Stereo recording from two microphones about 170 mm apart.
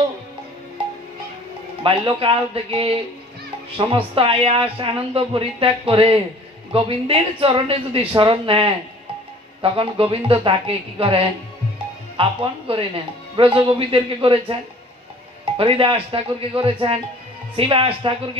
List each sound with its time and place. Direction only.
1.8 s speech: 30° right (ahead or behind)